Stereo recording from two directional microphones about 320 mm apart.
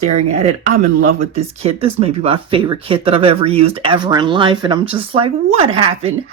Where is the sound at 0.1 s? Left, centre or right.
Right.